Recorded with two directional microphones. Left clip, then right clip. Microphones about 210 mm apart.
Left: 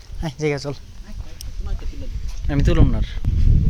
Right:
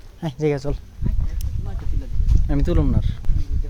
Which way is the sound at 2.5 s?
5° right (ahead or behind).